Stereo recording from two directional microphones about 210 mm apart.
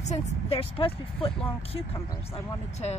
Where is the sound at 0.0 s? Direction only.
30° left (ahead or behind).